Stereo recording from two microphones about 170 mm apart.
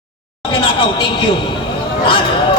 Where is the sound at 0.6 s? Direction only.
30° left (ahead or behind).